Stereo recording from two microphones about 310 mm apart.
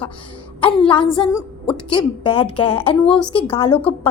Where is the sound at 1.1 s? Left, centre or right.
Centre.